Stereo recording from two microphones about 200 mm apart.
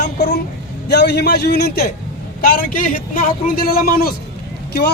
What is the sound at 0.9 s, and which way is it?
A man's voice, 55° left (ahead or behind).